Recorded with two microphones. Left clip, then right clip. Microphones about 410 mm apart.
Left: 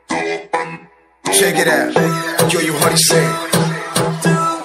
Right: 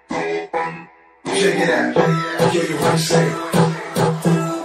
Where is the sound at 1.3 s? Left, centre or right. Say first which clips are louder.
Left 5 dB; left.